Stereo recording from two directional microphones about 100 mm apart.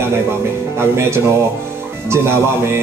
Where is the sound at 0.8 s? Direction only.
25° right (ahead or behind).